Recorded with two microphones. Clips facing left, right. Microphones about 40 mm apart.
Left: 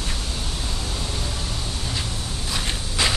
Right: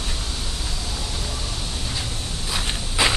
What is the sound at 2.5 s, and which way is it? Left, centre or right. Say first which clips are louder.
Walk: right 1 dB; centre.